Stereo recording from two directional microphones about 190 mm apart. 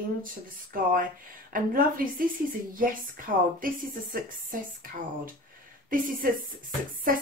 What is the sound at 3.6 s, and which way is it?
Speech, 45° right (ahead or behind).